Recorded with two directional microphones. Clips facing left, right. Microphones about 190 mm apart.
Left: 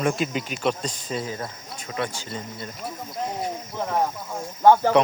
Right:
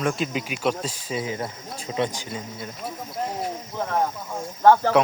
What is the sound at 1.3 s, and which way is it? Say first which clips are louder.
Speech: right 3 dB; 25° right (ahead or behind).